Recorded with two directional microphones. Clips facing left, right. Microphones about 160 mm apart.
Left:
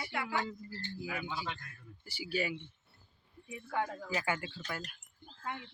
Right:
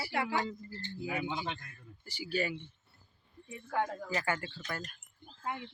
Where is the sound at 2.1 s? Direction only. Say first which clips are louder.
Right 1 dB; 10° left (ahead or behind).